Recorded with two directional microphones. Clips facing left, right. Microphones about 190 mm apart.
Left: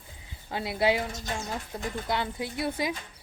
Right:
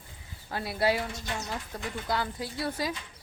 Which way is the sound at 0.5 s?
20° left (ahead or behind).